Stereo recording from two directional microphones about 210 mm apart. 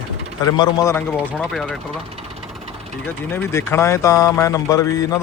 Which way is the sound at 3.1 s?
10° left (ahead or behind).